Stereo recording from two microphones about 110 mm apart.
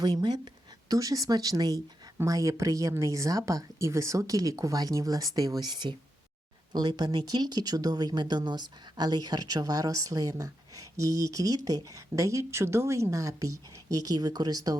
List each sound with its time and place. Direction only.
0.0 s speech: 40° right (ahead or behind)